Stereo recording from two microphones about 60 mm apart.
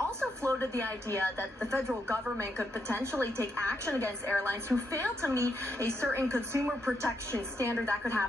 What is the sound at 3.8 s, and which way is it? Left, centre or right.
A woman's voice, right.